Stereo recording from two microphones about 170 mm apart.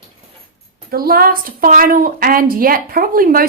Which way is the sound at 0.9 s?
60° right (ahead or behind).